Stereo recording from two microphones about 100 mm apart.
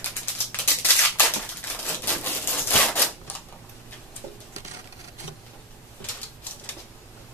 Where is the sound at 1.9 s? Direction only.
20° left (ahead or behind).